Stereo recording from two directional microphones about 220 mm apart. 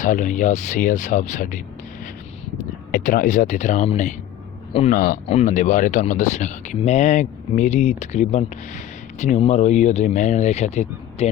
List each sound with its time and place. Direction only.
0.0 s speech: 35° left (ahead or behind)
2.9 s speech: 35° left (ahead or behind)